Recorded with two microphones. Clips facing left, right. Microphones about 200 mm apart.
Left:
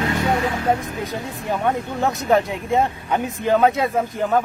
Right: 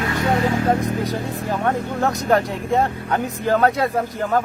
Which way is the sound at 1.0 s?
Centre (ahead or behind).